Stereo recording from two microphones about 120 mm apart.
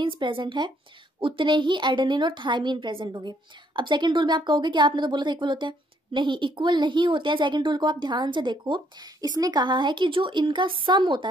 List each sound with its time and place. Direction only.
0.0 s a woman's voice: 45° right (ahead or behind)